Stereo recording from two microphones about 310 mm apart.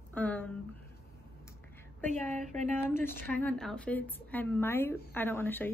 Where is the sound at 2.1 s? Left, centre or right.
Right.